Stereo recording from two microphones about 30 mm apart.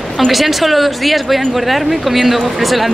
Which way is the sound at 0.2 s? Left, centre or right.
Centre.